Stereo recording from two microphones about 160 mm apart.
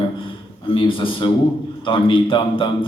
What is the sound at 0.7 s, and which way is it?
A man's voice, 35° left (ahead or behind).